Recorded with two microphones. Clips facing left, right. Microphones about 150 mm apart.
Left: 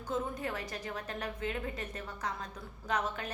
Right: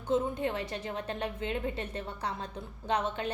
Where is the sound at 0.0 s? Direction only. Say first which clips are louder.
Right 6 dB; 25° right (ahead or behind).